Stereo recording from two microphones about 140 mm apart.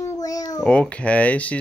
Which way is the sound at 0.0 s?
25° left (ahead or behind).